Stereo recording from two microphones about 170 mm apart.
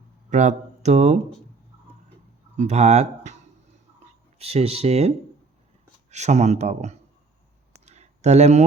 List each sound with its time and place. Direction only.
0.3 s speech: 45° right (ahead or behind)
2.6 s speech: 40° right (ahead or behind)
4.4 s speech: 35° right (ahead or behind)
7.7 s a sound: 40° right (ahead or behind)